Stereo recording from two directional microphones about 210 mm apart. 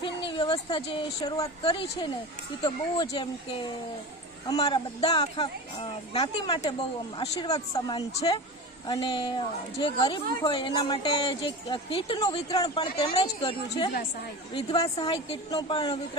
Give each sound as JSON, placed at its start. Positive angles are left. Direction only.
{"t": 0.0, "sound": "a woman's voice", "side_deg": 20}
{"t": 4.4, "sound": "speech", "side_deg": 20}